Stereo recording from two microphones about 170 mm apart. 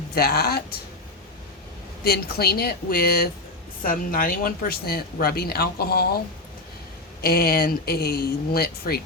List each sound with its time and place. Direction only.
0.1 s speech: 65° left (ahead or behind)
2.0 s speech: 65° left (ahead or behind)